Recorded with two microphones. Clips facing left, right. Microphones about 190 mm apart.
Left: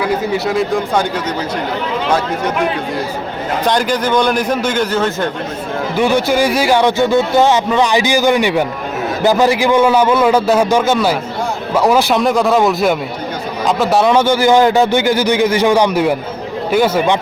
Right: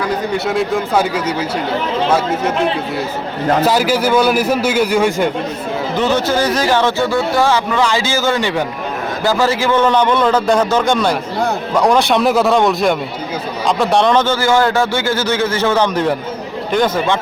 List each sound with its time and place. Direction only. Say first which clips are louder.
0.0 s a man's voice: left 2 dB; centre (ahead or behind)
3.6 s a man's voice: left 1 dB; 5° right (ahead or behind)
6.0 s a man's voice: left 3 dB; 10° left (ahead or behind)